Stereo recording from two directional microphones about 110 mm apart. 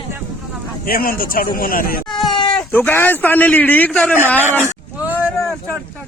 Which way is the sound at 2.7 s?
20° left (ahead or behind).